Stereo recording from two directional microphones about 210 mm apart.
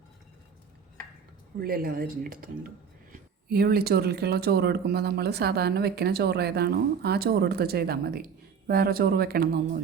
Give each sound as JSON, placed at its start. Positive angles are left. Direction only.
{"t": 1.5, "sound": "speech", "side_deg": -45}